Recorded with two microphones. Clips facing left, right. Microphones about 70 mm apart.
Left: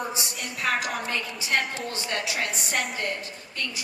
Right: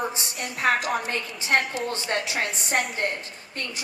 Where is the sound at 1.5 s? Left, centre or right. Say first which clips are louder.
Right 3 dB; right.